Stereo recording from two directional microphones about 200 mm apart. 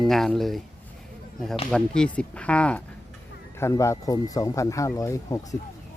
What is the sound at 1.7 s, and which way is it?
Speech, 5° left (ahead or behind).